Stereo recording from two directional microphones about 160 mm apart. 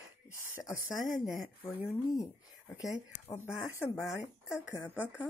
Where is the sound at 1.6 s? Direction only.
20° left (ahead or behind).